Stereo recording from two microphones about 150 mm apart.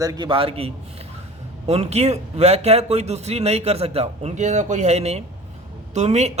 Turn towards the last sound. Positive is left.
turn(degrees=-50)  # may be behind; listen again after turning